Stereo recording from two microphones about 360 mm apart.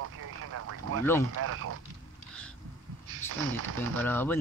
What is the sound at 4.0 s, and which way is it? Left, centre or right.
Speech, centre.